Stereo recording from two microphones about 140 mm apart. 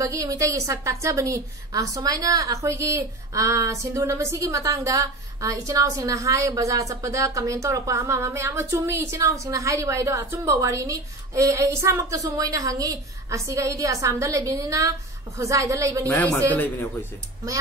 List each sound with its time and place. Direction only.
0.0 s a woman's voice: 25° right (ahead or behind)
16.4 s a man's voice: 15° left (ahead or behind)